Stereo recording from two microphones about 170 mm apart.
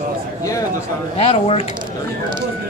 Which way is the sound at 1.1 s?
35° left (ahead or behind).